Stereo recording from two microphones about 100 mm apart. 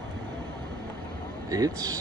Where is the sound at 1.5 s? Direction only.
35° right (ahead or behind).